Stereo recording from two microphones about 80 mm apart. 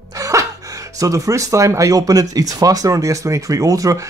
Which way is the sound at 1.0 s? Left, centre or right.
Right.